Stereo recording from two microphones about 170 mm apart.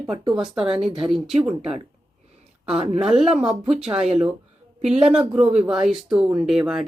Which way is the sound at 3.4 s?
40° right (ahead or behind).